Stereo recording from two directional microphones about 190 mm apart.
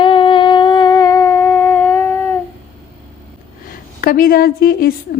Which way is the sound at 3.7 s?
50° left (ahead or behind).